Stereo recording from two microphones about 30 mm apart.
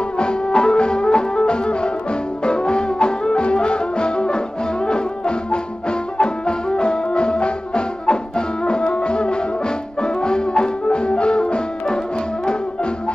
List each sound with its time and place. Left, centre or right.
0.2 s music: left